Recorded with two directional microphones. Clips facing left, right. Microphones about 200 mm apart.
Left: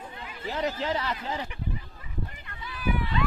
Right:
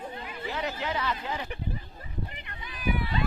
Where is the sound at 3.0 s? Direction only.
35° right (ahead or behind).